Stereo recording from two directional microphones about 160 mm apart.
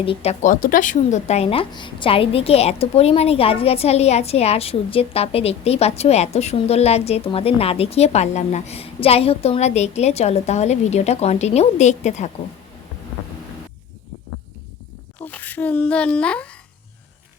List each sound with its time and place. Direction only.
0.0 s a woman's voice: 35° left (ahead or behind)
0.5 s a woman's voice: 55° left (ahead or behind)
15.2 s a child's voice: 10° left (ahead or behind)